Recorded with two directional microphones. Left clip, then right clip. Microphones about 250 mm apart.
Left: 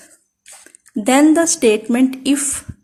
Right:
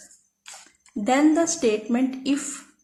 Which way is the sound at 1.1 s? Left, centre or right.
Left.